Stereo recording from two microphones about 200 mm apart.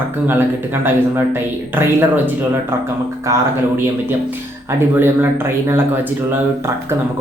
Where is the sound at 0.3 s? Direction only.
10° right (ahead or behind).